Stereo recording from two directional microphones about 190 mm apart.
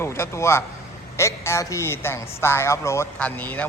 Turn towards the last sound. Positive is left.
turn(degrees=10)  # may be behind; listen again after turning